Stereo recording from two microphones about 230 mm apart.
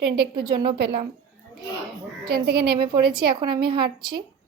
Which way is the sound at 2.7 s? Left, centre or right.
Right.